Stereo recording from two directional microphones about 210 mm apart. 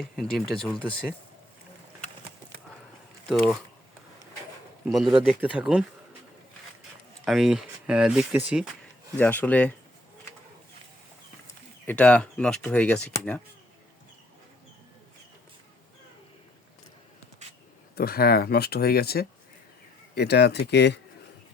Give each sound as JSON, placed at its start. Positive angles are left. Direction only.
{"t": 0.0, "sound": "speech", "side_deg": 0}
{"t": 3.2, "sound": "speech", "side_deg": 0}
{"t": 4.9, "sound": "speech", "side_deg": 0}
{"t": 7.3, "sound": "speech", "side_deg": 0}
{"t": 9.1, "sound": "speech", "side_deg": 10}
{"t": 11.9, "sound": "speech", "side_deg": 5}
{"t": 17.9, "sound": "speech", "side_deg": 45}